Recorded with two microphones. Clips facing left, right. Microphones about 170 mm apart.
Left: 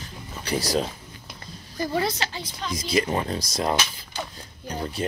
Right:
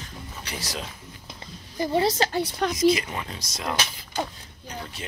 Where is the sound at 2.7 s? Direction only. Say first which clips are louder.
Right 1 dB; 35° left (ahead or behind).